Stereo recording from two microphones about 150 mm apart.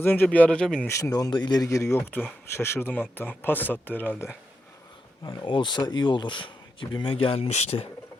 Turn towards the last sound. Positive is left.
turn(degrees=45)  # may be behind; listen again after turning